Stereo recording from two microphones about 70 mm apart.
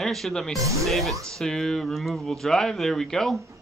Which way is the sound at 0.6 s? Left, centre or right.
Right.